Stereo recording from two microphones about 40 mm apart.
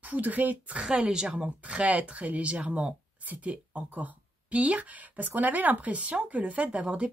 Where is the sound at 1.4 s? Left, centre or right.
Right.